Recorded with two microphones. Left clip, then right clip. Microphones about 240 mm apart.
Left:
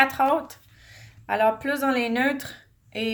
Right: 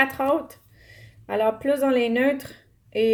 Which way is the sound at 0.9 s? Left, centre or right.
Left.